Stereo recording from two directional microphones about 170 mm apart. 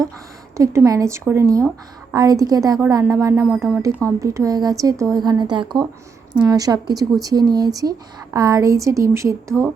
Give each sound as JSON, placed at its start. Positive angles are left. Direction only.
{"t": 0.5, "sound": "speech", "side_deg": -15}